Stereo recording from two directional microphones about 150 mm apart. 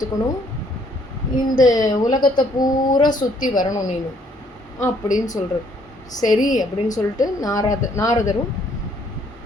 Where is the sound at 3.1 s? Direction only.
60° left (ahead or behind).